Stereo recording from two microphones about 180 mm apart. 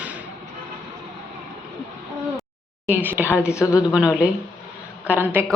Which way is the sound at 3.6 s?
20° left (ahead or behind).